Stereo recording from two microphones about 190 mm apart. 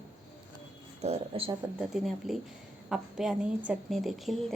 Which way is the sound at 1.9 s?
Centre (ahead or behind).